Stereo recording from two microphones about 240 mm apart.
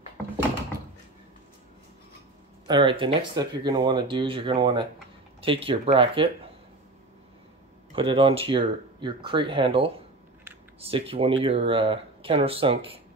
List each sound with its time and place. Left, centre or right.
2.6 s speech: centre
7.9 s speech: right